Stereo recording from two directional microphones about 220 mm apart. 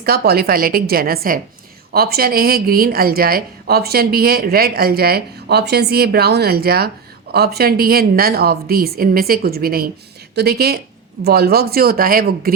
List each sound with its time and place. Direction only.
0.0 s a woman's voice: 45° right (ahead or behind)